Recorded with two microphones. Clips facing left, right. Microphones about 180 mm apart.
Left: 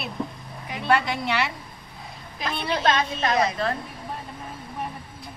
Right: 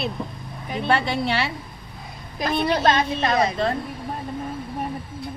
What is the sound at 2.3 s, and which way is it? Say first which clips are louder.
A woman's voice: right 6 dB; 45° right (ahead or behind).